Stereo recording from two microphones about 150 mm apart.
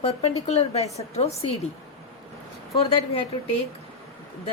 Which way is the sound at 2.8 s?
40° left (ahead or behind).